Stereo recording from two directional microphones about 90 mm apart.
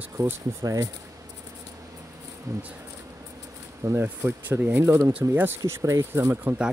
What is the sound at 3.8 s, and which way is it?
Speech, 25° right (ahead or behind).